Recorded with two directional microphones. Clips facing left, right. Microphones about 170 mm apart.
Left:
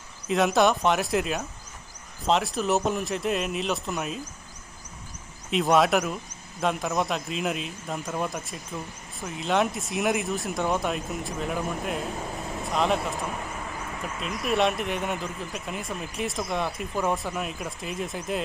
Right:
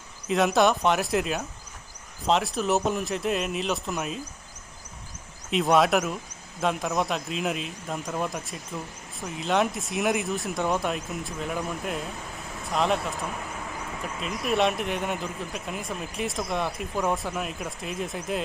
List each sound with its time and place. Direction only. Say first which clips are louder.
0.3 s speech: even; centre (ahead or behind)
5.5 s speech: even; centre (ahead or behind)